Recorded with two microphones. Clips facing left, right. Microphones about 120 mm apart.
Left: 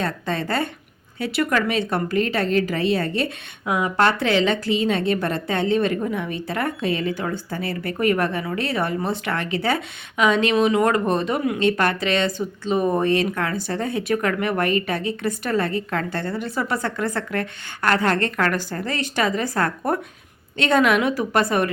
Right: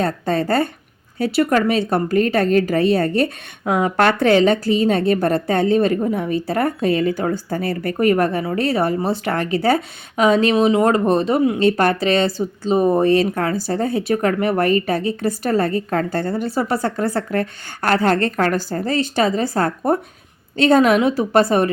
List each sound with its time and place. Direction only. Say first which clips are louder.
0.0 s a woman's voice: right 6 dB; 40° right (ahead or behind)
3.7 s a woman's voice: right 4 dB; 25° right (ahead or behind)
3.9 s speech: right 5 dB; 45° right (ahead or behind)